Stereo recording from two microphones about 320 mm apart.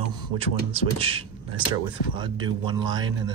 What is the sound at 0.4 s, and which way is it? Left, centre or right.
Speech, centre.